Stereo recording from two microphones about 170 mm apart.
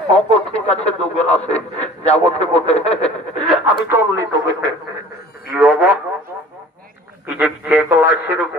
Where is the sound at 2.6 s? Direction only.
40° left (ahead or behind).